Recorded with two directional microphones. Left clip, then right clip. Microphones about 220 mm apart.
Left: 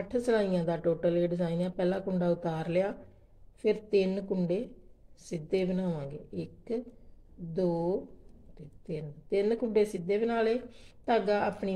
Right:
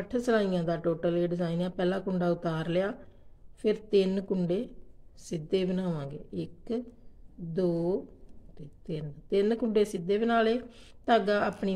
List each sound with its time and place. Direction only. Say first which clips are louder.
0.1 s speech: right 1 dB; 10° right (ahead or behind)